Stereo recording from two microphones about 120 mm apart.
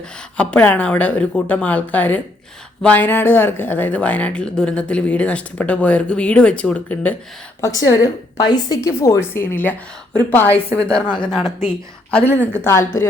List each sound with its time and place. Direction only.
0.3 s a woman's voice: 10° left (ahead or behind)
7.6 s a woman's voice: 30° left (ahead or behind)
8.9 s a woman's voice: 20° left (ahead or behind)
12.1 s a woman's voice: 15° left (ahead or behind)